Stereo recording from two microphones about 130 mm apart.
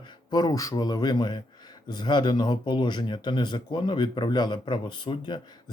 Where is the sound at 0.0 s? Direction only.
35° left (ahead or behind).